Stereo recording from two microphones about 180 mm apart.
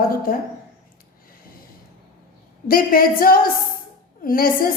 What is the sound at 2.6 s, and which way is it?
A woman's voice, 55° left (ahead or behind).